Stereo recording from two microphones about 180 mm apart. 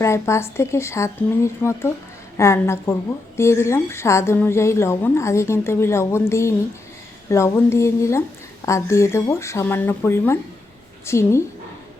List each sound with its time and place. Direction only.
0.0 s a woman's voice: 15° left (ahead or behind)